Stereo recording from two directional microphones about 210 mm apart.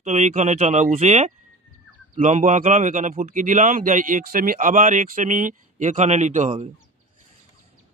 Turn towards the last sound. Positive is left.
turn(degrees=-35)  # may be behind; listen again after turning